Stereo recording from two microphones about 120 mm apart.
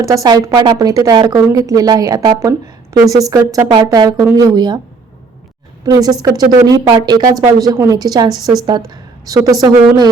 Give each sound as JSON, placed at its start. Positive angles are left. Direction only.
{"t": 0.0, "sound": "a woman's voice", "side_deg": -30}
{"t": 5.8, "sound": "a woman's voice", "side_deg": -30}